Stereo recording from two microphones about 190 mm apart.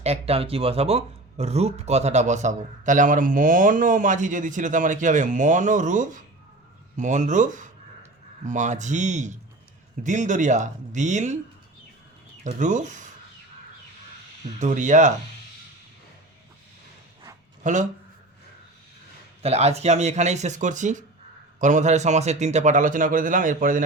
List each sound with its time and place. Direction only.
0.0 s speech: 30° right (ahead or behind)
12.5 s speech: 40° right (ahead or behind)
14.6 s speech: 40° right (ahead or behind)
17.6 s speech: 40° right (ahead or behind)
19.4 s speech: 35° right (ahead or behind)